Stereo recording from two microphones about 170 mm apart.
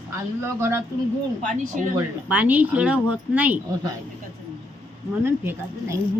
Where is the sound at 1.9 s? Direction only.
10° right (ahead or behind).